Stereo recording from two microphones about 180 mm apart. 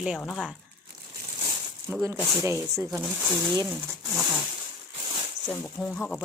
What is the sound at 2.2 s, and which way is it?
Speech, 10° right (ahead or behind).